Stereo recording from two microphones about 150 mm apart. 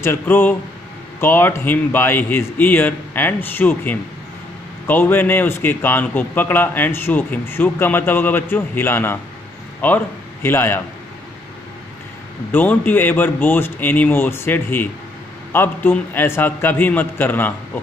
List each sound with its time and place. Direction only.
0.0 s speech: 15° left (ahead or behind)
12.5 s speech: 10° left (ahead or behind)